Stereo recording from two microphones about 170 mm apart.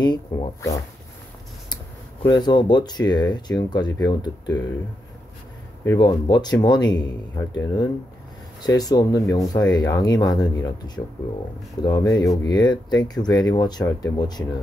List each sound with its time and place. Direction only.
0.0 s speech: 25° left (ahead or behind)
2.2 s speech: 25° left (ahead or behind)
5.9 s speech: 25° left (ahead or behind)
11.8 s speech: 25° left (ahead or behind)